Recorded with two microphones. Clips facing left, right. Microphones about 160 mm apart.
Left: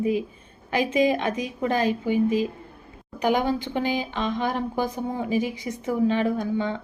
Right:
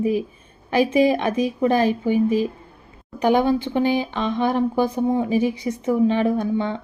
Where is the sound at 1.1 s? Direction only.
15° right (ahead or behind).